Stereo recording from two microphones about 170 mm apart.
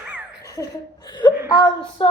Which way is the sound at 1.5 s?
25° left (ahead or behind).